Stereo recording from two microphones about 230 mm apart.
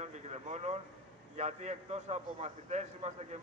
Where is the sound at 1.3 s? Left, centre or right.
Right.